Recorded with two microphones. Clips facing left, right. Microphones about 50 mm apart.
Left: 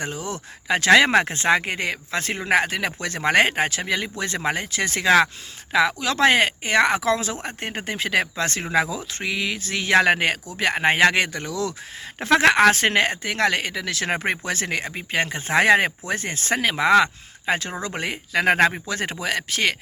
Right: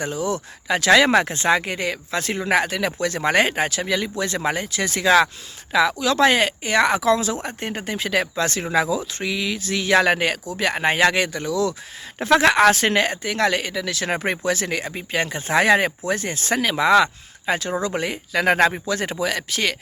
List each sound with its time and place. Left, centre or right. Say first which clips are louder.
0.0 s speech: right 5 dB; left